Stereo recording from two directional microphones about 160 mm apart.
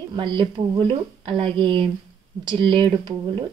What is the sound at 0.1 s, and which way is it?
Speech, 25° right (ahead or behind).